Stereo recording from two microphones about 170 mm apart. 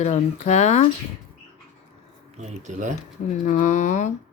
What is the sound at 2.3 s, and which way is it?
Speech, 45° right (ahead or behind).